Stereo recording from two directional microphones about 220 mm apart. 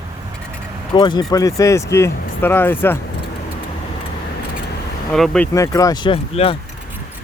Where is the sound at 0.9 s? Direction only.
20° left (ahead or behind).